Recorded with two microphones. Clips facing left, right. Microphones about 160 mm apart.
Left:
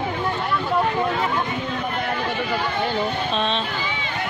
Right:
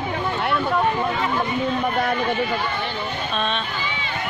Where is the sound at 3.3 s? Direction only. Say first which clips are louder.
Right 1 dB; 20° left (ahead or behind).